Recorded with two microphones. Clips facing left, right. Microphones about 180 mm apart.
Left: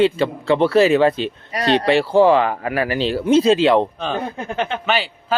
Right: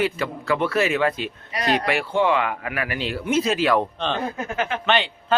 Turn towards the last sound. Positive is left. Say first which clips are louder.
# left 2 dB
turn(degrees=30)  # may be behind; listen again after turning